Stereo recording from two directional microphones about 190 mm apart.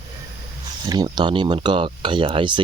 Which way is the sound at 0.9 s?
20° right (ahead or behind).